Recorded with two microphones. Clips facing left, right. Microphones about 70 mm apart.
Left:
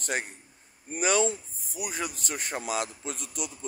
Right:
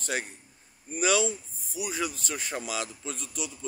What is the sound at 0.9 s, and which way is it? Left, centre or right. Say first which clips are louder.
Speech: even; left.